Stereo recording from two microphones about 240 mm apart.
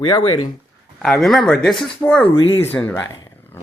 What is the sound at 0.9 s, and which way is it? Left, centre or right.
Speech, centre.